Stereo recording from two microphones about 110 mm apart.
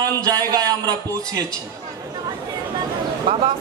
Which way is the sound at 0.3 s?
35° right (ahead or behind).